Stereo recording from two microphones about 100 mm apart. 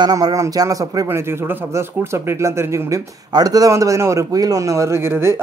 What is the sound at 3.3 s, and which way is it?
A man's voice, 40° right (ahead or behind).